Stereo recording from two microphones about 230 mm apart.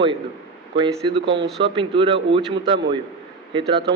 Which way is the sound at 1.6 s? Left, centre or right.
Right.